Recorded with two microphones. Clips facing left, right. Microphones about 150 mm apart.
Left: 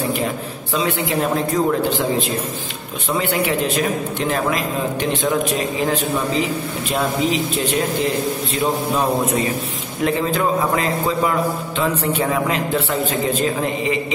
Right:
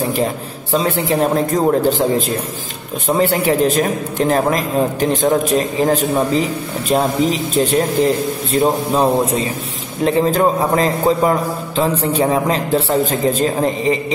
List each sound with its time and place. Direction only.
0.7 s a man's voice: 40° right (ahead or behind)